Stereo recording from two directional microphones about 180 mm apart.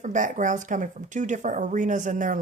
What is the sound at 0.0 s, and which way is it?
Speech, 45° right (ahead or behind).